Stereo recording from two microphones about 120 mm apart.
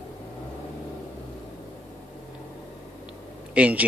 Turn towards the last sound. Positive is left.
turn(degrees=-10)  # may be behind; listen again after turning